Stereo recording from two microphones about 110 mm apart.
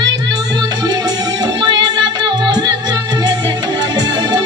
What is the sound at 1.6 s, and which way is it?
Music, 40° right (ahead or behind).